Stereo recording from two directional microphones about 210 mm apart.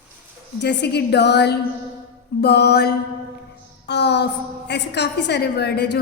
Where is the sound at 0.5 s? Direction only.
55° left (ahead or behind).